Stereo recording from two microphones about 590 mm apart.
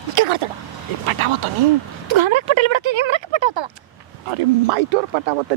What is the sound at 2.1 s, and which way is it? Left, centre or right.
Speech, right.